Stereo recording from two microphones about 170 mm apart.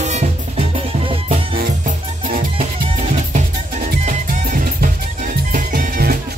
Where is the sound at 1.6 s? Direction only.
55° right (ahead or behind).